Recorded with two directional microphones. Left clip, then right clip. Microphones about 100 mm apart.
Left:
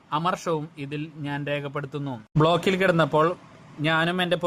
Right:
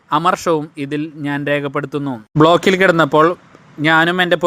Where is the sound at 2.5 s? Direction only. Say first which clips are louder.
Right 9 dB; 40° right (ahead or behind).